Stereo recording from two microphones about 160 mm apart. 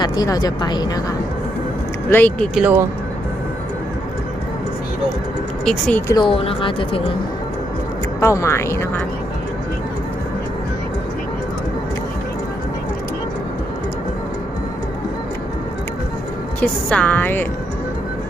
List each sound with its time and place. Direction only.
0.0 s speech: 25° left (ahead or behind)
2.0 s speech: 10° left (ahead or behind)
2.6 s speech: 10° right (ahead or behind)
5.6 s speech: 5° left (ahead or behind)
6.1 s speech: 30° left (ahead or behind)
8.2 s speech: 20° left (ahead or behind)
16.6 s speech: 10° left (ahead or behind)